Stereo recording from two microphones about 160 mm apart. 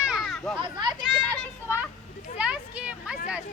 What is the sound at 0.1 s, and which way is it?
Children playing, centre (ahead or behind).